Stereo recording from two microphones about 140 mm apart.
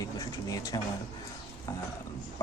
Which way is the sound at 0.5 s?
25° left (ahead or behind).